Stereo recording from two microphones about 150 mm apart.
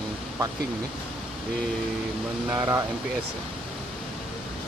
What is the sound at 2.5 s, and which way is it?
Speech, 20° right (ahead or behind).